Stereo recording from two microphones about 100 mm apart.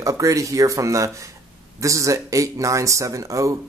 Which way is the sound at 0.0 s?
35° right (ahead or behind).